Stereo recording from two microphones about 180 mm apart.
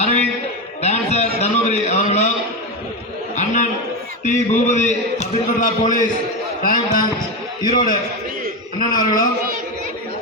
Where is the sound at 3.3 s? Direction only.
40° left (ahead or behind).